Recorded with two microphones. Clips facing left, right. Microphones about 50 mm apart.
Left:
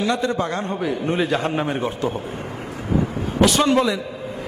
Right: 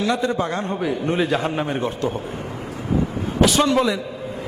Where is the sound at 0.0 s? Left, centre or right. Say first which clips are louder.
Even; centre.